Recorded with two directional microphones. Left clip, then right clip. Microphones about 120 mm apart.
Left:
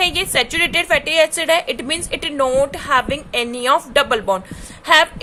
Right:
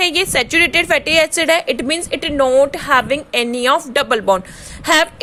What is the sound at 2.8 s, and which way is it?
A woman's voice, 40° right (ahead or behind).